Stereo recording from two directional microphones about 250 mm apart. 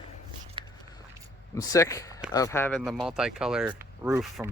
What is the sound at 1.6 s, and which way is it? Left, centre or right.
Speech, centre.